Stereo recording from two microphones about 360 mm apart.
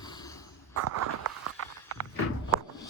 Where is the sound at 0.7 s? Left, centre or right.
Right.